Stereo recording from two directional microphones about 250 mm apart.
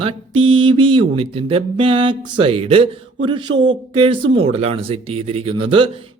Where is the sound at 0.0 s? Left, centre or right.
Right.